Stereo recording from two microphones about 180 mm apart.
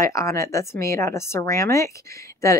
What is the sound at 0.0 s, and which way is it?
Speech, 15° left (ahead or behind).